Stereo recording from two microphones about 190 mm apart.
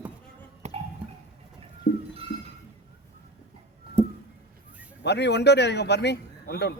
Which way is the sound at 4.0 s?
5° left (ahead or behind).